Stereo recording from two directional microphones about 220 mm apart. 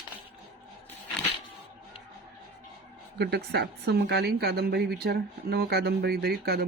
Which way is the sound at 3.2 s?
50° right (ahead or behind).